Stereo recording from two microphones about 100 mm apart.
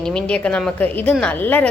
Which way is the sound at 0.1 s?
10° left (ahead or behind).